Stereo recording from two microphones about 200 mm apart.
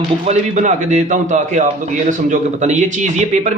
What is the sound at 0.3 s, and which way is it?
A man's voice, 35° right (ahead or behind).